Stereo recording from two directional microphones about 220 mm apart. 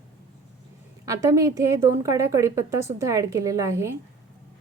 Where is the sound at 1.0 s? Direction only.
15° right (ahead or behind).